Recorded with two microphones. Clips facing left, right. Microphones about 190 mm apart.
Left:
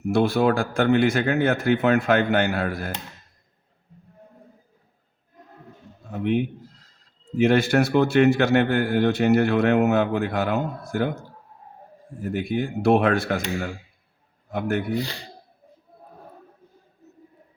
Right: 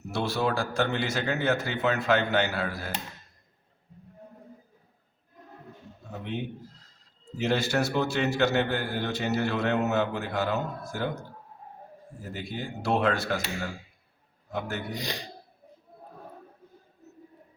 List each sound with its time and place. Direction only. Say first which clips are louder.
0.1 s speech: left 8 dB; 55° left (ahead or behind)
6.1 s a man's voice: left 12 dB; 50° left (ahead or behind)
7.3 s a man's voice: left 8 dB; 55° left (ahead or behind)
12.2 s a man's voice: left 11 dB; 55° left (ahead or behind)
14.9 s speech: left 7 dB; 15° right (ahead or behind)